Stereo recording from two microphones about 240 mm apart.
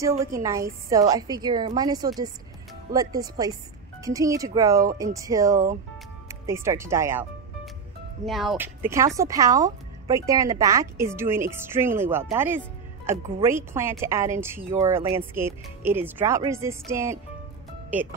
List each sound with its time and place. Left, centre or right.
0.2 s speech: centre
8.3 s speech: centre